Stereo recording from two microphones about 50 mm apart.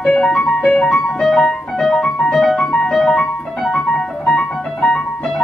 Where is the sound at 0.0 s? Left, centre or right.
Centre.